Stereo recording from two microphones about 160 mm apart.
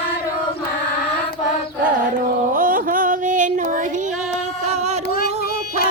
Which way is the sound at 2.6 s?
60° right (ahead or behind).